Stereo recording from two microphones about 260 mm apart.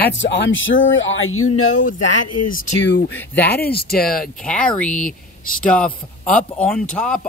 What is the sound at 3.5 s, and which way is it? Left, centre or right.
Speech, left.